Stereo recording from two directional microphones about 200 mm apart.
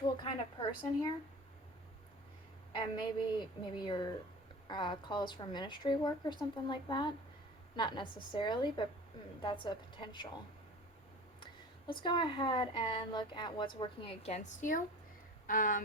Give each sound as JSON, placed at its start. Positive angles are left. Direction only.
{"t": 0.0, "sound": "a sound", "side_deg": 20}
{"t": 2.7, "sound": "a woman's voice", "side_deg": 20}
{"t": 11.9, "sound": "a woman's voice", "side_deg": 25}